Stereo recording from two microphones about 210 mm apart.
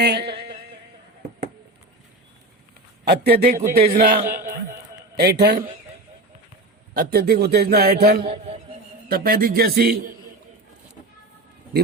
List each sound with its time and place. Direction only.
0.0 s a sound: 50° right (ahead or behind)
3.0 s a man's voice: 50° right (ahead or behind)
6.9 s a man's voice: 45° right (ahead or behind)
8.2 s a man's voice: 30° right (ahead or behind)
9.0 s a man's voice: 45° right (ahead or behind)